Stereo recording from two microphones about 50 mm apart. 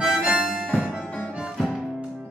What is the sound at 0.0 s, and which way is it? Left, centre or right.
Music, centre.